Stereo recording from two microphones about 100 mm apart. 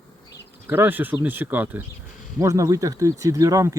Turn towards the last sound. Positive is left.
turn(degrees=-35)  # may be behind; listen again after turning